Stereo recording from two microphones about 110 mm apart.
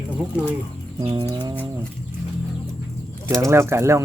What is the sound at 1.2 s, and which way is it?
Speech, 35° right (ahead or behind).